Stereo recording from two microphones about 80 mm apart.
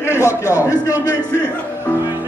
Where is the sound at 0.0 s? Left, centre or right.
Left.